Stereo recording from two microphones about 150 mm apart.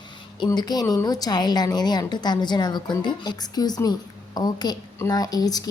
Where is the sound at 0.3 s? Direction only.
30° left (ahead or behind).